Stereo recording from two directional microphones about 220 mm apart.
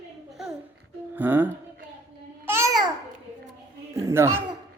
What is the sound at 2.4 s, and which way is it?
Babbling, 10° right (ahead or behind).